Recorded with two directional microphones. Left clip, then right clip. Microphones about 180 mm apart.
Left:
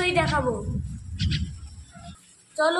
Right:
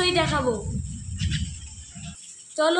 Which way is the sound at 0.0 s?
75° right (ahead or behind).